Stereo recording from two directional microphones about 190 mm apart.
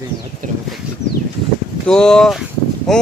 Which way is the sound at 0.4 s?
45° right (ahead or behind).